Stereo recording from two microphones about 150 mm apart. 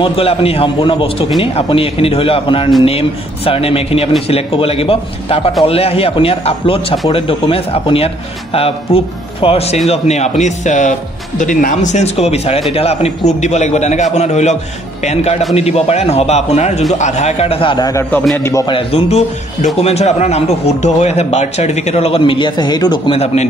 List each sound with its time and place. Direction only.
0.0 s a man's voice: 40° left (ahead or behind); by 18.7 s 20° left (ahead or behind)
18.7 s speech: 40° left (ahead or behind)
23.1 s speech: 45° left (ahead or behind)